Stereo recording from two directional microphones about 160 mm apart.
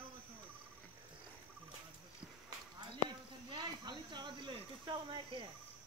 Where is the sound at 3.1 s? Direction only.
30° right (ahead or behind).